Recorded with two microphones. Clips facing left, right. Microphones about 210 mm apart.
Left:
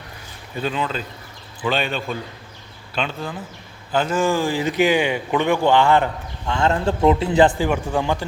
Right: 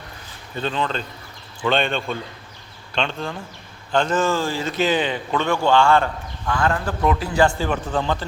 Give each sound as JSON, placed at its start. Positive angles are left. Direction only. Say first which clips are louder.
{"t": 0.5, "sound": "a man's voice", "louder": "even", "side_deg": 10}